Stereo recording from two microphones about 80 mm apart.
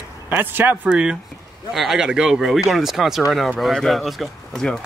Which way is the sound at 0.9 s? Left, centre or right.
Centre.